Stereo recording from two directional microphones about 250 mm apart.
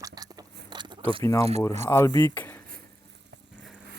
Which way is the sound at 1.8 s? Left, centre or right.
Centre.